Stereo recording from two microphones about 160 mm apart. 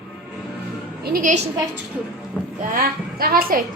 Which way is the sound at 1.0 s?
60° right (ahead or behind).